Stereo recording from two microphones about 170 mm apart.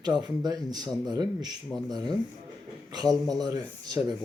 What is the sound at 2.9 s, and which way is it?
Speech, 20° right (ahead or behind).